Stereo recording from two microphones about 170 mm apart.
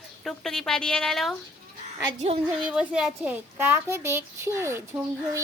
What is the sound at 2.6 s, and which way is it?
A child's voice, 5° right (ahead or behind).